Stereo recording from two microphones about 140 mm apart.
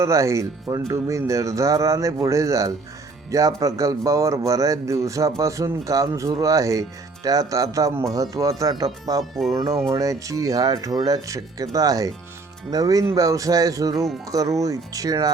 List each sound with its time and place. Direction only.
0.0 s speech: 20° right (ahead or behind)
9.3 s speech: centre (ahead or behind)
9.9 s speech: 25° right (ahead or behind)